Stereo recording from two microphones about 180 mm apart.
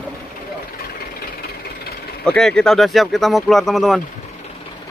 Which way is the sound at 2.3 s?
5° left (ahead or behind).